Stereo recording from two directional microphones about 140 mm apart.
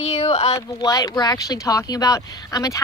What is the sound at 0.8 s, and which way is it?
A woman's voice, 25° left (ahead or behind).